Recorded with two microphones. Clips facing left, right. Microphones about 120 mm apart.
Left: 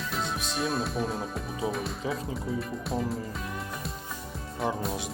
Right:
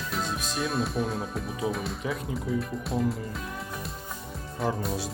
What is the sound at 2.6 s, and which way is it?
Music, centre (ahead or behind).